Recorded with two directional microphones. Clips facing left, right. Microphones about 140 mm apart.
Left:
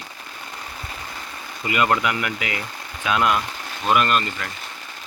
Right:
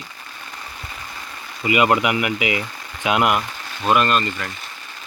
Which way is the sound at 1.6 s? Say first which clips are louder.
Right 3 dB; 10° right (ahead or behind).